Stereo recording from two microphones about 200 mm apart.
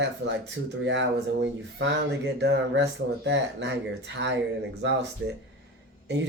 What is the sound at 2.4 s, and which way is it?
Speech, 60° right (ahead or behind).